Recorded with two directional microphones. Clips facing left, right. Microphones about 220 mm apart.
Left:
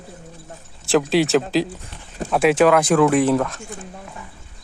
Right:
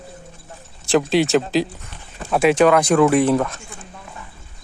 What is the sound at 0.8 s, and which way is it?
Speech, centre (ahead or behind).